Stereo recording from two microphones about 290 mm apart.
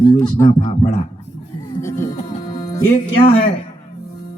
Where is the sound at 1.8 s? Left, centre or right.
Centre.